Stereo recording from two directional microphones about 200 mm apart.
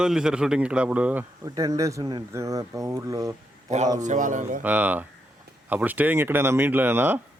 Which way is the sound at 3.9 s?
40° right (ahead or behind).